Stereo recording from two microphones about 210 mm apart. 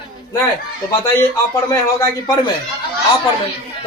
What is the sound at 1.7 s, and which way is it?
Speech, 15° left (ahead or behind).